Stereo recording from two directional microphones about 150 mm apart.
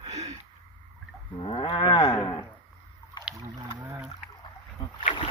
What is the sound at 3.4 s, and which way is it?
Boat, 20° right (ahead or behind).